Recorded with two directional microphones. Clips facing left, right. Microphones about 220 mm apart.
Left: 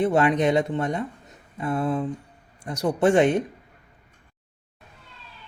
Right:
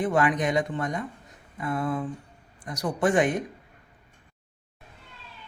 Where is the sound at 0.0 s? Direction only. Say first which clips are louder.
Left 4 dB; 25° left (ahead or behind).